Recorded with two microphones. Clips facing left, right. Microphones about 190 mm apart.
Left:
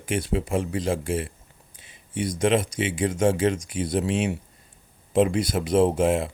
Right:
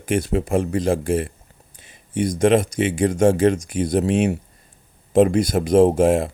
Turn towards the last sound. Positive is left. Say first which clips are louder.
# right 5 dB
turn(degrees=-45)  # may be behind; listen again after turning